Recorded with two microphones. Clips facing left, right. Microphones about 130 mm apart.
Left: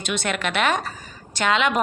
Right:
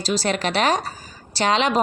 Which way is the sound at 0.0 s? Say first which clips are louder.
Right 3 dB; 35° right (ahead or behind).